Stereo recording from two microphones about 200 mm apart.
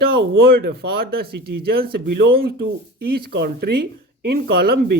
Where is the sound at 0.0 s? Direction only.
50° right (ahead or behind).